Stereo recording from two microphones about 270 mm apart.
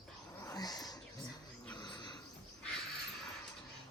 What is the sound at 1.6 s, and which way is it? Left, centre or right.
Wild animals, centre.